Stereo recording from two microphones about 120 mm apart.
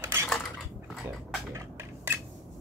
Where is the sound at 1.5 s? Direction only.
20° right (ahead or behind).